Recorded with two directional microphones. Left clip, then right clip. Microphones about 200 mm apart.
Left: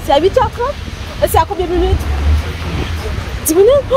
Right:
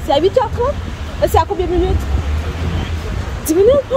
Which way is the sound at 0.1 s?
Centre (ahead or behind).